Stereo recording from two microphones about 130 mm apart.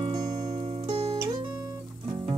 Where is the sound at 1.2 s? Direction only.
30° right (ahead or behind).